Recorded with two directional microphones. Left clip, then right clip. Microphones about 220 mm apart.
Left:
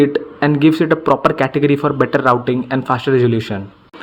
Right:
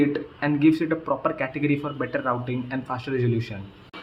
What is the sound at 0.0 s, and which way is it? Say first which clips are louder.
Speech: left 10 dB; 35° left (ahead or behind).